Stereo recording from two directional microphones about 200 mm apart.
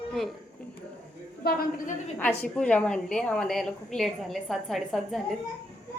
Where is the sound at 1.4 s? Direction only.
50° left (ahead or behind).